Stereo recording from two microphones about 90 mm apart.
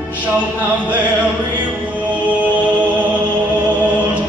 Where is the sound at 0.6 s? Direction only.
20° right (ahead or behind).